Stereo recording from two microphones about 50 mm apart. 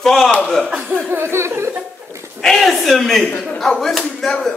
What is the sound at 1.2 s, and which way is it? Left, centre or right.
Chuckle, right.